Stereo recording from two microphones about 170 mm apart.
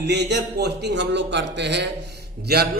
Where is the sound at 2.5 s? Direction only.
70° right (ahead or behind).